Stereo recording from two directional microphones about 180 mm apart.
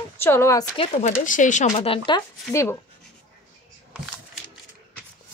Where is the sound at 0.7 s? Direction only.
35° left (ahead or behind); by 2.8 s 15° left (ahead or behind).